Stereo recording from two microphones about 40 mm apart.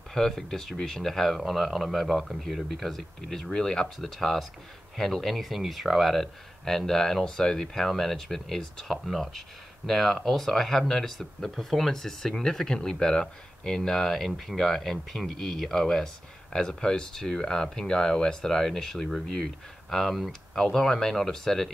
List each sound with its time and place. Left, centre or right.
0.1 s speech: centre